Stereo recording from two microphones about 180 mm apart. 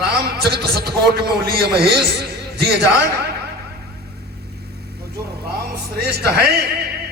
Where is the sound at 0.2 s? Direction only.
60° right (ahead or behind).